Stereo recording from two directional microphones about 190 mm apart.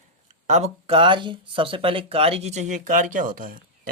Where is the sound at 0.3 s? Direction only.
35° right (ahead or behind).